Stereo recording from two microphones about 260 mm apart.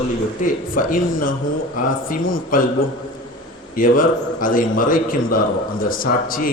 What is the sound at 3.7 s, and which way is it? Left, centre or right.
A man's voice, left.